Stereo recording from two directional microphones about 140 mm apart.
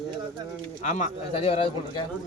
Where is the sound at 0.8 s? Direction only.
60° left (ahead or behind); by 1.7 s 45° left (ahead or behind).